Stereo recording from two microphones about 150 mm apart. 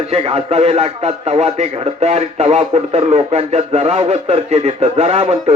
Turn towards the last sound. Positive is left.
turn(degrees=-45)  # may be behind; listen again after turning